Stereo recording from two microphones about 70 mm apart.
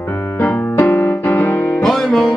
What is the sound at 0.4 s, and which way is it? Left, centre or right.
Music, left.